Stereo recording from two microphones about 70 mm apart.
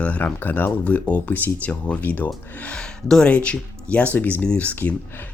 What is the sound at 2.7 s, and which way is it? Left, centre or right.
Speech, centre.